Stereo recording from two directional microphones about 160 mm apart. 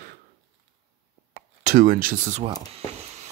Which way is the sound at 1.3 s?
60° right (ahead or behind).